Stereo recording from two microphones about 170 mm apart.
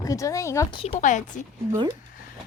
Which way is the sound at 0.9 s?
45° left (ahead or behind).